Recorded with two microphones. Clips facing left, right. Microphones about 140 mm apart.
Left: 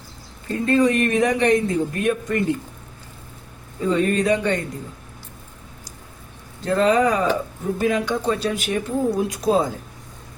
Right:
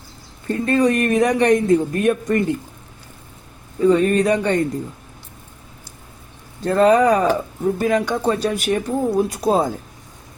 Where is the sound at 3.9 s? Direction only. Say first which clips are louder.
Right 3 dB; 40° right (ahead or behind).